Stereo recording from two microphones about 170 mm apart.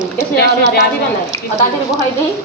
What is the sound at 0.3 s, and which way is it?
Speech, 70° left (ahead or behind).